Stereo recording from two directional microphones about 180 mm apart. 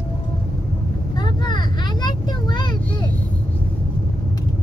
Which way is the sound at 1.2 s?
25° left (ahead or behind).